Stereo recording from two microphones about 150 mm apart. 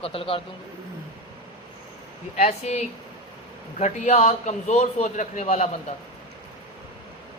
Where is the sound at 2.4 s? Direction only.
50° left (ahead or behind).